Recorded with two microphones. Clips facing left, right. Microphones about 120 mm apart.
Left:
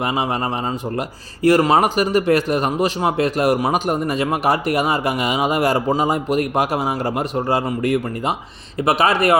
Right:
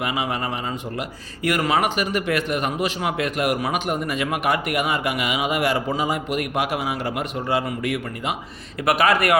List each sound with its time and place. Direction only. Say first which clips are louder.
0.0 s speech: left 4 dB; 35° left (ahead or behind)
8.8 s a man's voice: left 2 dB; 25° left (ahead or behind)